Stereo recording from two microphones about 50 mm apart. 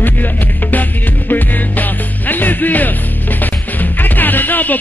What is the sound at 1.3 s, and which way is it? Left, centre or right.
Music, left.